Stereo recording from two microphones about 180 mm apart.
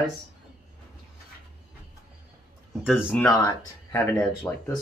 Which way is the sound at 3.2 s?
10° left (ahead or behind).